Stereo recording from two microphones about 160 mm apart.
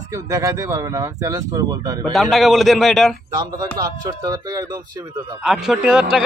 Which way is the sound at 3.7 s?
25° right (ahead or behind).